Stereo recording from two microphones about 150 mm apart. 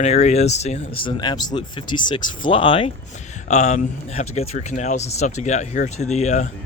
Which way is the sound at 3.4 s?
50° left (ahead or behind).